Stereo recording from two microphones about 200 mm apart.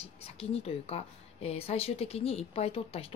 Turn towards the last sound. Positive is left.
turn(degrees=30)  # may be behind; listen again after turning